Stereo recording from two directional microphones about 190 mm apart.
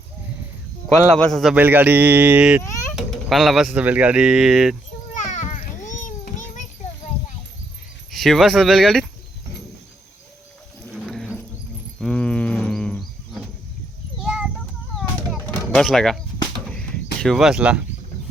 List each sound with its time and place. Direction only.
1.2 s speech: centre (ahead or behind)
5.1 s children playing: 40° left (ahead or behind)
8.1 s speech: centre (ahead or behind)
11.0 s a sound: centre (ahead or behind)
14.2 s children playing: 5° right (ahead or behind)
15.3 s a sound: centre (ahead or behind)
16.6 s bird: centre (ahead or behind)